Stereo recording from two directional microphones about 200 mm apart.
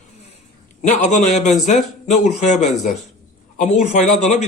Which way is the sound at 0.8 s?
35° left (ahead or behind).